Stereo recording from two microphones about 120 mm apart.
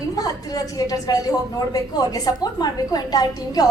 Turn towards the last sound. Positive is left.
turn(degrees=30)  # may be behind; listen again after turning